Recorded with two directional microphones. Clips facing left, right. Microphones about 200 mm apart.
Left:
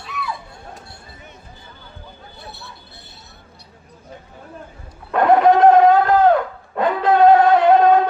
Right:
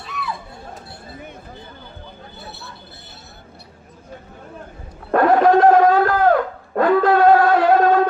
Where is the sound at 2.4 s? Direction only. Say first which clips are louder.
Even; centre (ahead or behind).